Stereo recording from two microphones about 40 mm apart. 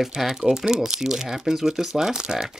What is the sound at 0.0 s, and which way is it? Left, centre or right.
Speech, centre.